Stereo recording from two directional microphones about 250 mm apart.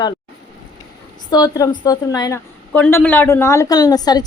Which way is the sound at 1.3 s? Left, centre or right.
Centre.